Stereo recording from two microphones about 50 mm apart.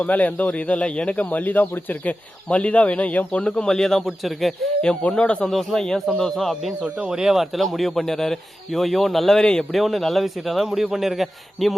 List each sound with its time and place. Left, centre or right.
0.0 s speech: left
3.4 s a man's voice: centre
5.0 s speech: left
5.5 s a man's voice: centre
6.8 s speech: centre
9.7 s speech: centre